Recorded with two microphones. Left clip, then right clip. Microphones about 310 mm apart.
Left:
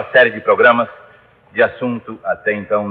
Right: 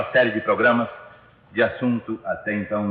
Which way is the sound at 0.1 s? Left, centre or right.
Left.